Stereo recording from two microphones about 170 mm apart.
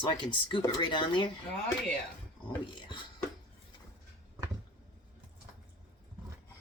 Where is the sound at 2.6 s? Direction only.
30° left (ahead or behind).